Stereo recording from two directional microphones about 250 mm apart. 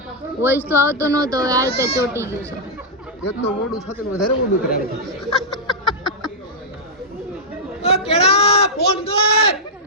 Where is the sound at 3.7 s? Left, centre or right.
Centre.